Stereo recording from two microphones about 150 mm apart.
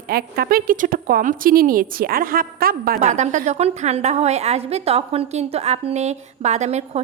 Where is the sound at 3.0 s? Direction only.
55° right (ahead or behind).